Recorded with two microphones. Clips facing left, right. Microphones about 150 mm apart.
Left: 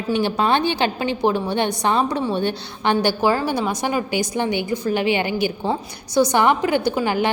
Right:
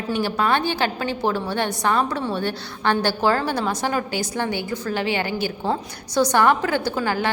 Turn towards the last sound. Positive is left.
turn(degrees=20)  # may be behind; listen again after turning